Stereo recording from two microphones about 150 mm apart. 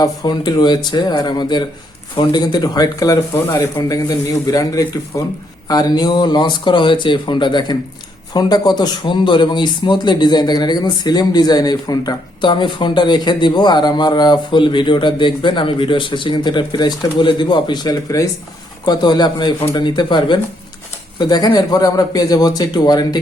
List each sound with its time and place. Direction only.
0.0 s speech: 25° left (ahead or behind)